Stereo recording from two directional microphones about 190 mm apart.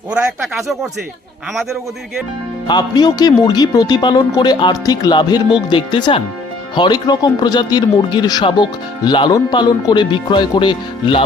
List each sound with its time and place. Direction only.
0.1 s speech: 5° right (ahead or behind)
2.6 s speech: 20° left (ahead or behind)